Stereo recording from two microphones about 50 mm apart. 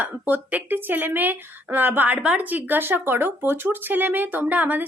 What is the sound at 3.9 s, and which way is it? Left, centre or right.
Speech, right.